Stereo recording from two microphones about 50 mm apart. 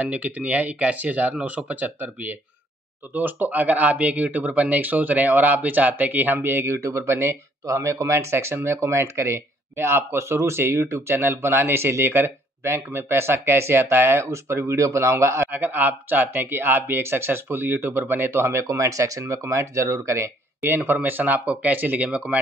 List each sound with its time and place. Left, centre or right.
0.0 s speech: right
14.3 s speech: right
15.5 s speech: right
20.6 s speech: right
22.0 s speech: right